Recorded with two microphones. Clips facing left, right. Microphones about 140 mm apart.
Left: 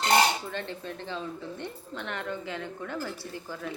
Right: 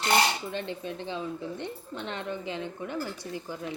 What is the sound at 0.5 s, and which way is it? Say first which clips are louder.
Speech: right 2 dB; 15° right (ahead or behind).